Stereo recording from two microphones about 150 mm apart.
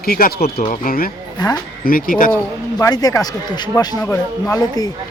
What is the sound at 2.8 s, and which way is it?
A man's voice, 25° left (ahead or behind).